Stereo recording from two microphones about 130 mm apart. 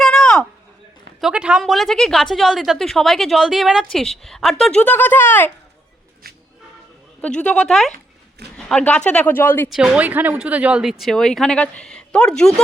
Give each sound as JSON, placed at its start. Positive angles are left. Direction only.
{"t": 0.0, "sound": "a sound", "side_deg": 5}
{"t": 1.2, "sound": "a woman's voice", "side_deg": -10}
{"t": 7.2, "sound": "a woman's voice", "side_deg": 10}
{"t": 9.6, "sound": "a woman's voice", "side_deg": -5}